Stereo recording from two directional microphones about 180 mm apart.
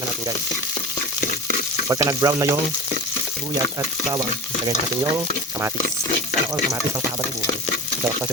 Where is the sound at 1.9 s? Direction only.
20° right (ahead or behind).